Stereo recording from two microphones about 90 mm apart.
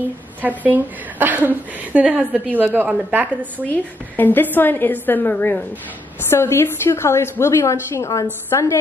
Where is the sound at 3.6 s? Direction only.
20° left (ahead or behind).